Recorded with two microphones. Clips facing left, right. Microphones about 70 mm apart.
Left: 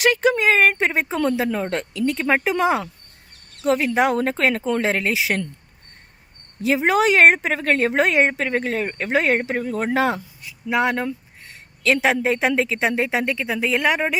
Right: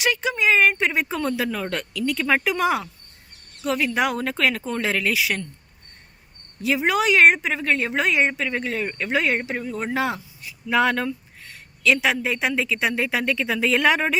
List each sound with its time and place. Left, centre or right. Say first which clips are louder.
0.0 s a woman's voice: left 5 dB; left
6.6 s a woman's voice: left 3 dB; left
10.7 s speech: even; centre
11.8 s a woman's voice: left 2 dB; left
13.0 s speech: left 2 dB; left
13.4 s speech: right 4 dB; centre